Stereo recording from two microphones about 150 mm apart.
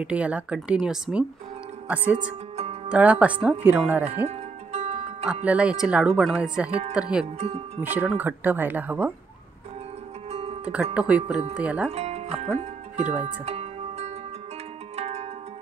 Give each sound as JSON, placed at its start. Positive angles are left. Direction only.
{"t": 0.0, "sound": "speech", "side_deg": -10}
{"t": 2.1, "sound": "music", "side_deg": -40}
{"t": 2.9, "sound": "speech", "side_deg": -10}
{"t": 4.3, "sound": "music", "side_deg": -45}
{"t": 5.3, "sound": "speech", "side_deg": -10}
{"t": 7.4, "sound": "speech", "side_deg": -45}
{"t": 7.8, "sound": "speech", "side_deg": -10}
{"t": 10.3, "sound": "music", "side_deg": -40}
{"t": 10.6, "sound": "speech", "side_deg": -5}
{"t": 11.9, "sound": "music", "side_deg": -45}
{"t": 13.2, "sound": "zither", "side_deg": -50}
{"t": 15.0, "sound": "music", "side_deg": -45}